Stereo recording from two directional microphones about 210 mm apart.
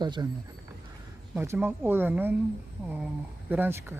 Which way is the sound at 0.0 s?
20° right (ahead or behind).